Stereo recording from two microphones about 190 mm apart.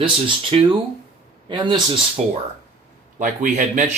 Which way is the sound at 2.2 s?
35° right (ahead or behind).